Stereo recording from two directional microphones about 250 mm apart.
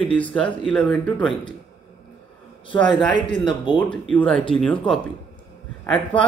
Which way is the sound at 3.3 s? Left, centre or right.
Centre.